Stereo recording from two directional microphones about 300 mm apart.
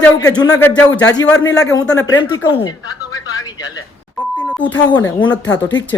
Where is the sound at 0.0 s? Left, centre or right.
Centre.